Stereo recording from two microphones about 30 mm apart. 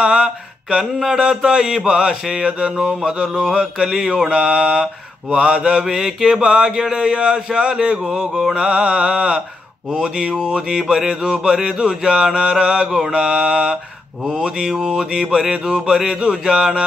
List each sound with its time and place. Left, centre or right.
0.0 s mantra: right
1.1 s speech: right
2.8 s a sound: centre
3.5 s speech: right
5.3 s mantra: right
5.8 s speech: centre
8.0 s a sound: centre
8.5 s mantra: right
10.4 s speech: right